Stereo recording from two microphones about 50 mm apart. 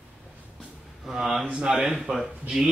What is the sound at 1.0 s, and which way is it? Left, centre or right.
Speech, centre.